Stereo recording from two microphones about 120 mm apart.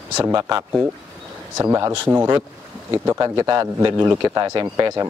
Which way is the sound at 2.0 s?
20° right (ahead or behind).